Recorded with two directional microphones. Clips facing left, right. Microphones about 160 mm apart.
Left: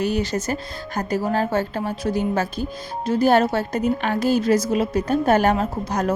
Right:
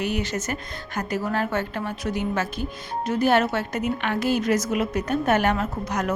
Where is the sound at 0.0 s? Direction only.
35° left (ahead or behind).